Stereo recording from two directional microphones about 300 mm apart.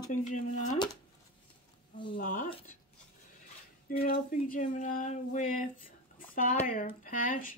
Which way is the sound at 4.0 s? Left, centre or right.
Left.